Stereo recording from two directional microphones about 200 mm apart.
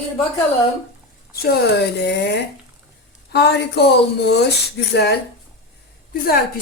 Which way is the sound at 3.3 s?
55° left (ahead or behind).